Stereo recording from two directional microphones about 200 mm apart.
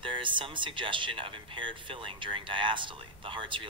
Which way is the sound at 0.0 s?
25° right (ahead or behind).